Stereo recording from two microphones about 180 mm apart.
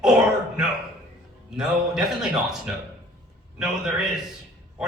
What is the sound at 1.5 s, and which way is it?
Speech, 5° right (ahead or behind).